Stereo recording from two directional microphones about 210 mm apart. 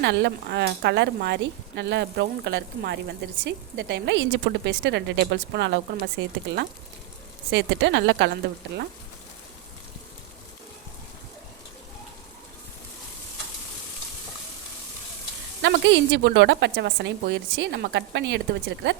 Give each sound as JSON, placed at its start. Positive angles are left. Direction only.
{"t": 0.0, "sound": "speech", "side_deg": -55}
{"t": 15.6, "sound": "speech", "side_deg": -55}